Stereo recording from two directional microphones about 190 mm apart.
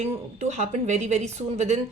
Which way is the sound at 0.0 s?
35° right (ahead or behind).